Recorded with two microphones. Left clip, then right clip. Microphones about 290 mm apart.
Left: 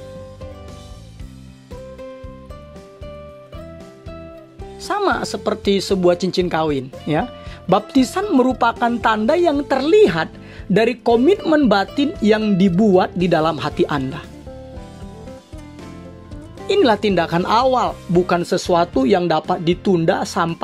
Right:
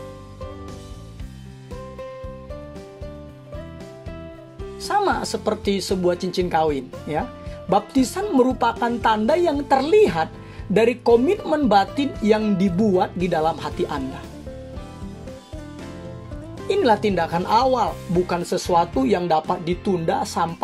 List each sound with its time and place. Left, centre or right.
4.8 s speech: left
16.6 s speech: left